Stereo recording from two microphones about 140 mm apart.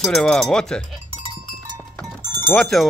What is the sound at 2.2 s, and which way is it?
Music, 30° right (ahead or behind).